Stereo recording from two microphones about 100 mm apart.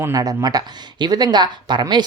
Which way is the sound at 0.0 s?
35° right (ahead or behind).